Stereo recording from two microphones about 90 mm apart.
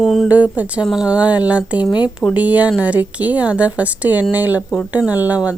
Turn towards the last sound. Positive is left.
turn(degrees=-15)  # may be behind; listen again after turning